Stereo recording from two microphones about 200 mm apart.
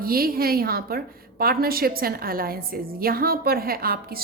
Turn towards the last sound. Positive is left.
turn(degrees=-50)  # may be behind; listen again after turning